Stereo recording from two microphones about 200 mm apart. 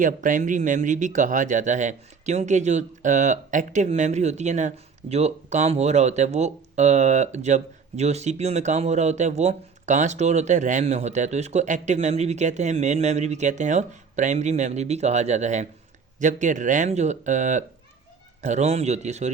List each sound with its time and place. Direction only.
0.0 s speech: 40° right (ahead or behind)